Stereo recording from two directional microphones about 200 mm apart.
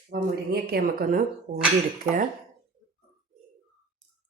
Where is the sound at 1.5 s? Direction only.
35° right (ahead or behind).